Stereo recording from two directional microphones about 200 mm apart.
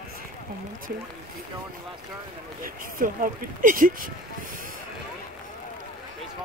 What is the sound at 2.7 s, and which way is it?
Speech, 45° right (ahead or behind).